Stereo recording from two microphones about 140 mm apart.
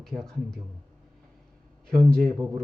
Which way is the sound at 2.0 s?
5° left (ahead or behind).